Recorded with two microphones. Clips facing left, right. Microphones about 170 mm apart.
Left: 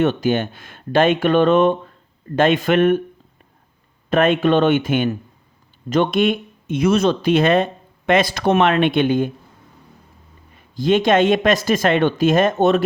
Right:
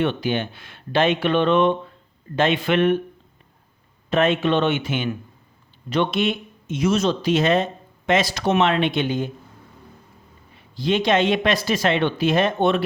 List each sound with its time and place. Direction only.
0.0 s speech: 45° left (ahead or behind)
4.1 s speech: 50° left (ahead or behind)
10.8 s speech: 50° left (ahead or behind)